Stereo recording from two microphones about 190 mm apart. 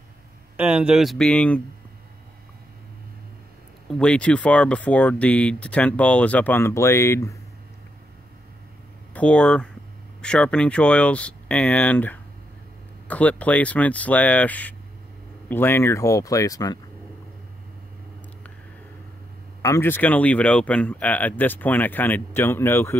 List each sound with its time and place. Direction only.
0.6 s speech: 5° right (ahead or behind)
3.9 s speech: 5° left (ahead or behind)
9.1 s speech: 5° left (ahead or behind)
19.6 s speech: 15° left (ahead or behind)